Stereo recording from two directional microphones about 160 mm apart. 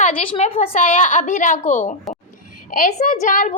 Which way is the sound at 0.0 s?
40° left (ahead or behind).